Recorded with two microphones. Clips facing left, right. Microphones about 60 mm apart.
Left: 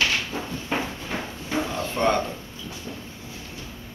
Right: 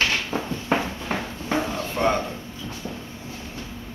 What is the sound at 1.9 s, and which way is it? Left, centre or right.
Speech, centre.